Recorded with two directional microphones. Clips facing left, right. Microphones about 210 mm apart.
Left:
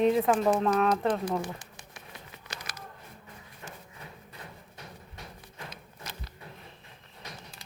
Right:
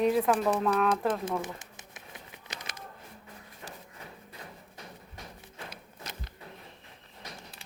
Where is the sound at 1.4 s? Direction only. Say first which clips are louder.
Left 1 dB; 20° right (ahead or behind).